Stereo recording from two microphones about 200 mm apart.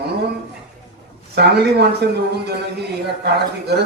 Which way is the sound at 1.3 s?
55° right (ahead or behind).